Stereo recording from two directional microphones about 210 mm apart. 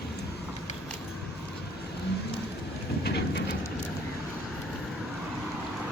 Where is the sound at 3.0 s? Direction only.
50° left (ahead or behind).